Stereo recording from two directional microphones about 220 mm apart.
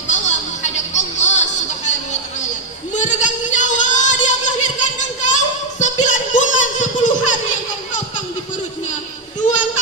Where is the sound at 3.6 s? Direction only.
35° left (ahead or behind).